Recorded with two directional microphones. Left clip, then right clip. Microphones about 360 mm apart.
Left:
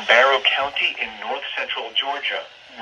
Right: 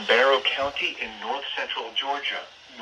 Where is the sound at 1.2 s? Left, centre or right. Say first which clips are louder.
Left 1 dB; centre.